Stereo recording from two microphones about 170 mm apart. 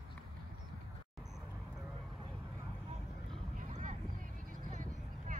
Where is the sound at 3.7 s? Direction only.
45° right (ahead or behind).